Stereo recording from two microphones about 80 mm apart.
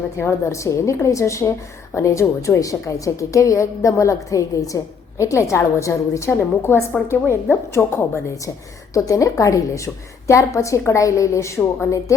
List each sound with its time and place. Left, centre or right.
0.2 s a woman's voice: left
8.9 s a woman's voice: left